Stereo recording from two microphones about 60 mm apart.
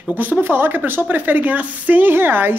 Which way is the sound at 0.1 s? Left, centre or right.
Right.